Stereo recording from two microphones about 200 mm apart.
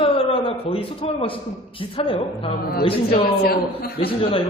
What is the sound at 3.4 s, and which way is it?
Speech, 50° left (ahead or behind).